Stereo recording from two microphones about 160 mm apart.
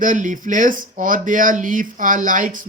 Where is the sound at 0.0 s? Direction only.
55° right (ahead or behind).